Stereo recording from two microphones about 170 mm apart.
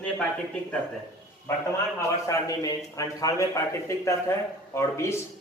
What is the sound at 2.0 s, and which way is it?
A man's voice, 20° left (ahead or behind).